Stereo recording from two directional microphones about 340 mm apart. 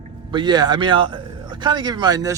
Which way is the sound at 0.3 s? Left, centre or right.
Centre.